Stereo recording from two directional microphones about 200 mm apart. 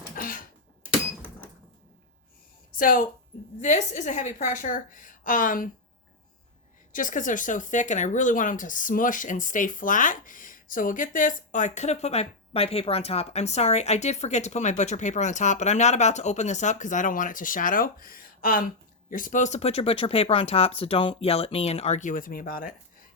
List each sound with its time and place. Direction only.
2.7 s a woman's voice: 45° left (ahead or behind)
6.9 s speech: 40° left (ahead or behind)